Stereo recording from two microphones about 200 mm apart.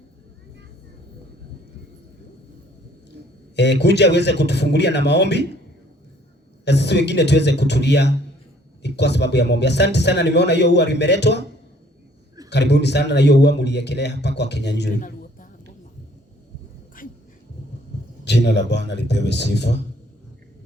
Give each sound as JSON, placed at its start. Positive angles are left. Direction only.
{"t": 3.5, "sound": "a man's voice", "side_deg": 60}
{"t": 6.7, "sound": "a man's voice", "side_deg": 60}
{"t": 12.5, "sound": "a man's voice", "side_deg": 60}
{"t": 14.9, "sound": "a sound", "side_deg": 40}
{"t": 17.0, "sound": "dog", "side_deg": 45}
{"t": 18.3, "sound": "a man's voice", "side_deg": 60}